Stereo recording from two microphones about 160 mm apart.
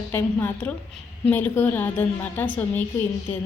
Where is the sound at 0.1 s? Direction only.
15° left (ahead or behind).